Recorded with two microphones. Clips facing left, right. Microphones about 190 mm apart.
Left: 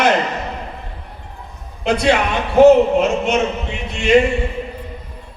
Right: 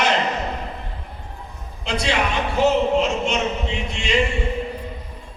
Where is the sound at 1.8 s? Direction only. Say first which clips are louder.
Left 7 dB; 55° left (ahead or behind).